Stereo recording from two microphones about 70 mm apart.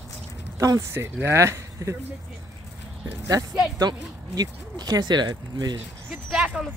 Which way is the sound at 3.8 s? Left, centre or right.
Right.